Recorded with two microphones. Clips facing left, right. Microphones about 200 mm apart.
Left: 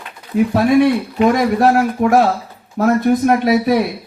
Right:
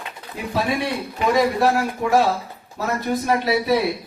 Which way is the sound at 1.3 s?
55° left (ahead or behind).